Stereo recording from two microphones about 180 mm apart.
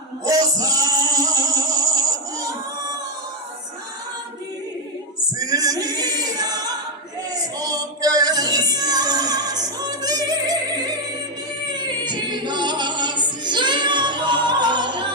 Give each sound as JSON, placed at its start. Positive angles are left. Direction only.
{"t": 0.3, "sound": "music", "side_deg": -20}
{"t": 5.4, "sound": "choir", "side_deg": -20}
{"t": 7.6, "sound": "music", "side_deg": -20}